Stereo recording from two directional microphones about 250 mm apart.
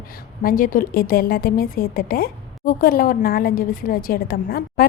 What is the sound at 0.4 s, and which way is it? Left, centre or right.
A woman's voice, left.